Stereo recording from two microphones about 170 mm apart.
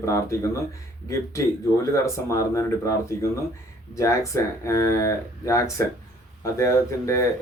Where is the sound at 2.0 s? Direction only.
20° left (ahead or behind).